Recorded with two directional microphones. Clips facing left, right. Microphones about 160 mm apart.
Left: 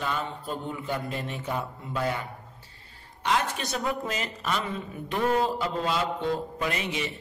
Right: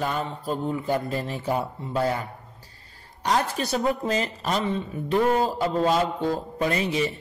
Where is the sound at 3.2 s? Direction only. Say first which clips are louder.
Right 3 dB; 35° right (ahead or behind).